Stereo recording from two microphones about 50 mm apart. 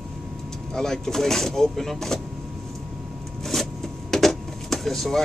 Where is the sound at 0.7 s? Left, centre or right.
Centre.